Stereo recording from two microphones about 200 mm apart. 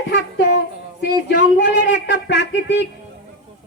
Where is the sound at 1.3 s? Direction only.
60° left (ahead or behind).